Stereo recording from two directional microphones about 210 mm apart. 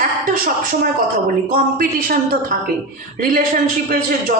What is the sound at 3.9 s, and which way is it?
Speech, 40° right (ahead or behind).